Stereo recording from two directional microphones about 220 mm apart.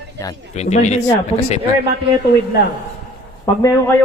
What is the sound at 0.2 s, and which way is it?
Speech, 15° left (ahead or behind).